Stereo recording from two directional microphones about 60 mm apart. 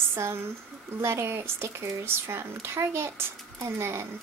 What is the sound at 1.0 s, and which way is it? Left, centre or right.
Speech, right.